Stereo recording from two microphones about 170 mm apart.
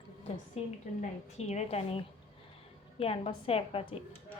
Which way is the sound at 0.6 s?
40° left (ahead or behind).